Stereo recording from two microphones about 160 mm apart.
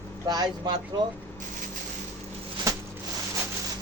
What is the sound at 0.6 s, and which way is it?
Speech, 25° right (ahead or behind).